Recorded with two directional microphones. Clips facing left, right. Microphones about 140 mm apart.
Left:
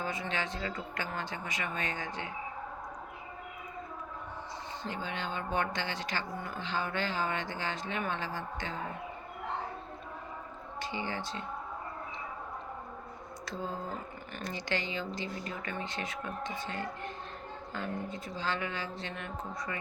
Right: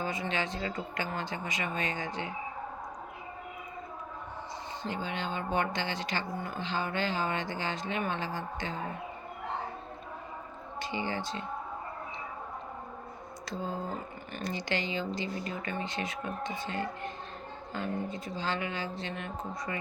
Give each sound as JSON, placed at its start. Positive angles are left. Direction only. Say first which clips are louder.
{"t": 0.0, "sound": "speech", "louder": "right 2 dB", "side_deg": -15}
{"t": 4.9, "sound": "speech", "louder": "right 3 dB", "side_deg": -20}
{"t": 10.8, "sound": "speech", "louder": "right 3 dB", "side_deg": -15}
{"t": 14.3, "sound": "speech", "louder": "right 2 dB", "side_deg": -15}